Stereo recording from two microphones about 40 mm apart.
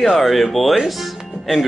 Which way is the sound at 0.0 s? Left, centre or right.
Centre.